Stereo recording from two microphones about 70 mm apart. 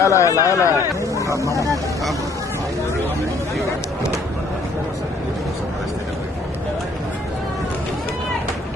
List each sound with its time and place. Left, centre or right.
0.0 s a man's voice: left
1.2 s speech: right